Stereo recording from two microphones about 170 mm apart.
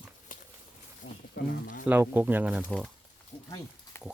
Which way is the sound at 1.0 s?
90° left.